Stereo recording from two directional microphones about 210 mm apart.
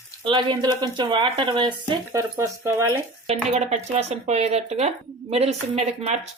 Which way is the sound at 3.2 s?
30° right (ahead or behind).